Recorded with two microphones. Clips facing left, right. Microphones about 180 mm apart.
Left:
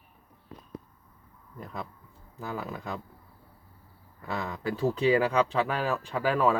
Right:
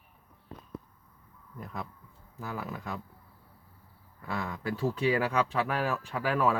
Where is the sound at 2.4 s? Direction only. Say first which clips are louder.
Left 2 dB; 5° right (ahead or behind).